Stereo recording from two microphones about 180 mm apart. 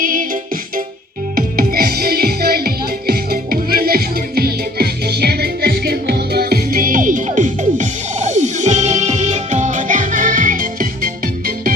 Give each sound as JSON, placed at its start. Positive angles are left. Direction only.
{"t": 0.0, "sound": "music", "side_deg": -50}